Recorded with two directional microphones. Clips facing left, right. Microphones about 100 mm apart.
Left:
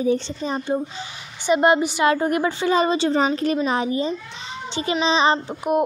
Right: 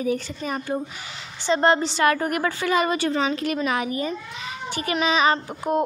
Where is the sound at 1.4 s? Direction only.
15° left (ahead or behind).